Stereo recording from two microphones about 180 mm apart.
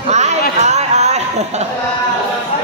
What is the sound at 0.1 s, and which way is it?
Chatter, 40° right (ahead or behind).